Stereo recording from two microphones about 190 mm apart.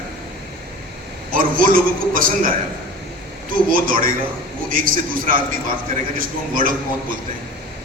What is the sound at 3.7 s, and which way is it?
A man's voice, 45° right (ahead or behind).